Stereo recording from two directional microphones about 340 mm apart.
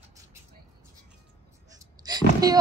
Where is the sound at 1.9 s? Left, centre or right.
Centre.